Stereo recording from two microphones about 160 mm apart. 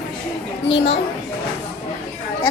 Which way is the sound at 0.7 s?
90° left.